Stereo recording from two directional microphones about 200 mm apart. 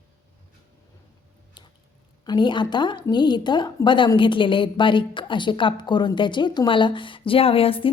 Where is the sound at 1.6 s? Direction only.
25° left (ahead or behind).